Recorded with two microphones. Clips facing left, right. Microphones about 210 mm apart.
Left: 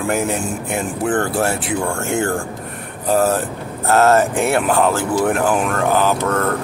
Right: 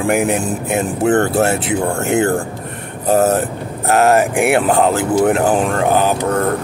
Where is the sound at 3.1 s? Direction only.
20° right (ahead or behind).